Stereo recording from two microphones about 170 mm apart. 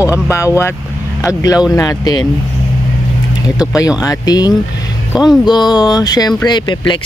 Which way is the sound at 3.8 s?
20° left (ahead or behind).